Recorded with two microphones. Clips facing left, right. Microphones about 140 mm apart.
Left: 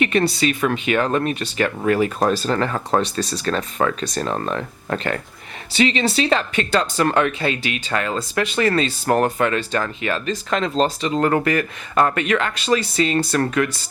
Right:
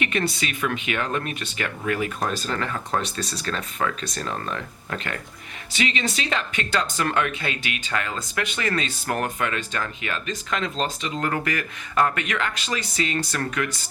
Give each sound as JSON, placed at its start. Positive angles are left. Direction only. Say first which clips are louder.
{"t": 0.0, "sound": "speech", "louder": "left 7 dB", "side_deg": 35}